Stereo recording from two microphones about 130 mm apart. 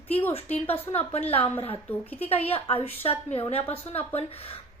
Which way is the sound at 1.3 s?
45° left (ahead or behind).